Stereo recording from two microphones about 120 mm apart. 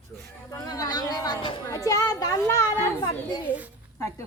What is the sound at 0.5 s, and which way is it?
A child's voice, 30° left (ahead or behind).